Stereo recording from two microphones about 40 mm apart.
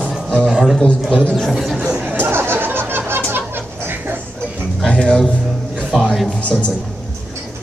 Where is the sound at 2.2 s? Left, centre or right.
Right.